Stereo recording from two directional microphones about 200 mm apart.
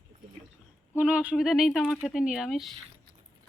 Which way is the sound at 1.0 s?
5° right (ahead or behind).